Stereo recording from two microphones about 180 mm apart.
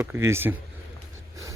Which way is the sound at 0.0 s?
10° right (ahead or behind).